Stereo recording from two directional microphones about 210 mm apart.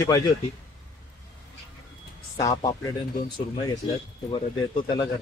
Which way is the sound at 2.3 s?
15° left (ahead or behind).